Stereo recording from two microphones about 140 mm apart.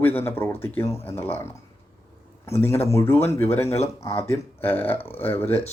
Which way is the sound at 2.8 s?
20° left (ahead or behind).